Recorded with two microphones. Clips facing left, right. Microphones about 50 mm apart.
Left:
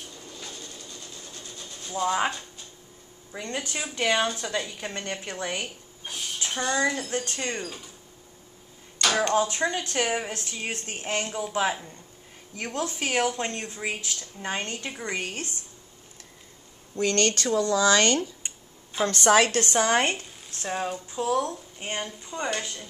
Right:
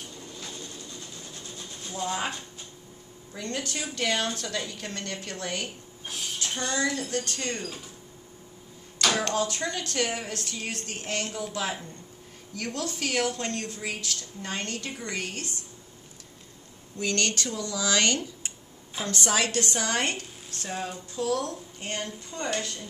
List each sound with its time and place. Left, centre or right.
1.9 s speech: centre
3.3 s speech: left
9.3 s speech: left
16.9 s speech: left
18.9 s a woman's voice: left; by 22.8 s centre